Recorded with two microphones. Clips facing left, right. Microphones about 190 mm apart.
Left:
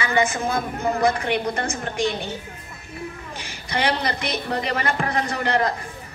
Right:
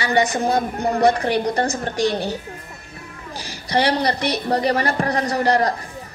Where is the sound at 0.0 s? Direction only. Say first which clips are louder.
Right 3 dB; 35° right (ahead or behind).